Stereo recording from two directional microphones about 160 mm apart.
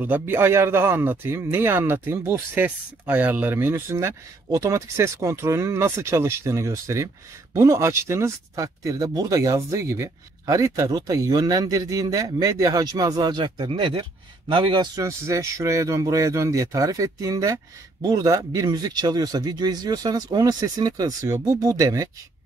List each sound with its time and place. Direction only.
0.0 s speech: 10° right (ahead or behind)